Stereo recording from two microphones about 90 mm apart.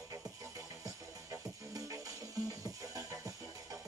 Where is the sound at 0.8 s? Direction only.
40° right (ahead or behind).